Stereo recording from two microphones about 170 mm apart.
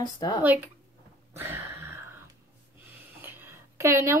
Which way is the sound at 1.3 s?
15° right (ahead or behind).